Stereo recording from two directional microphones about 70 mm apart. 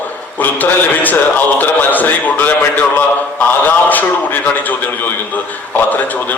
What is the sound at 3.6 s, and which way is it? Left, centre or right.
Speech, left.